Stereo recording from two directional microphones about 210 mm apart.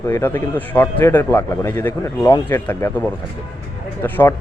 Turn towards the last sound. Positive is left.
turn(degrees=10)  # may be behind; listen again after turning